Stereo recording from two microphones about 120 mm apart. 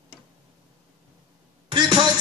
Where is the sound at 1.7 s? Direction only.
40° right (ahead or behind).